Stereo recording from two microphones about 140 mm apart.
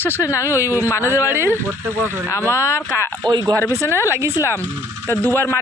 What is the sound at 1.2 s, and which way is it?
Speech, 15° right (ahead or behind).